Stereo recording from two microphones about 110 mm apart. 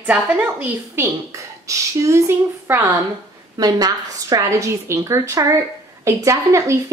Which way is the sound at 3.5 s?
35° right (ahead or behind).